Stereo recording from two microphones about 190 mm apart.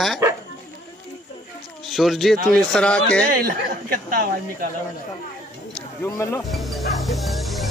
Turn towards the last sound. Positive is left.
turn(degrees=0)  # may be behind; listen again after turning